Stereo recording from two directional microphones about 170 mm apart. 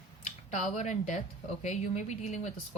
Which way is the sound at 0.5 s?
45° left (ahead or behind).